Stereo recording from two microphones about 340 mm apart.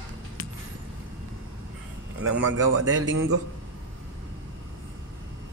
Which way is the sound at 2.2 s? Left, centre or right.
Right.